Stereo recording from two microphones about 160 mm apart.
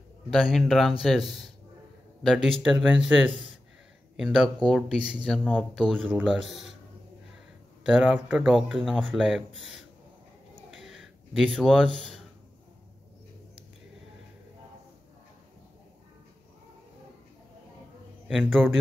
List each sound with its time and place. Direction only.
0.3 s speech: centre (ahead or behind)
3.3 s speech: 35° right (ahead or behind)
4.2 s speech: centre (ahead or behind)
7.8 s speech: 5° right (ahead or behind)
10.7 s a sound: centre (ahead or behind)
18.3 s speech: centre (ahead or behind)